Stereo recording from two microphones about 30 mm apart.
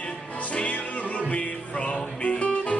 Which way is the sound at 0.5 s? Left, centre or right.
Left.